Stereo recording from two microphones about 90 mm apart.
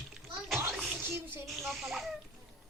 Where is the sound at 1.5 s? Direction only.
Centre (ahead or behind).